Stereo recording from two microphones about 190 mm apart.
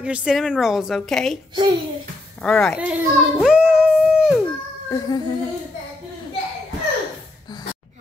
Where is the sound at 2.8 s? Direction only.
5° right (ahead or behind).